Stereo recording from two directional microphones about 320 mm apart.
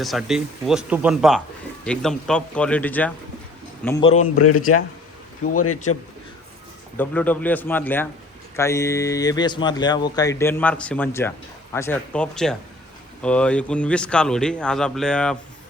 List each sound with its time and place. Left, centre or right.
0.0 s speech: centre
3.8 s a man's voice: centre
4.4 s speech: left
6.9 s speech: centre